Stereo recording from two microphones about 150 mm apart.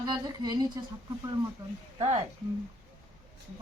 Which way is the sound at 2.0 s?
40° right (ahead or behind).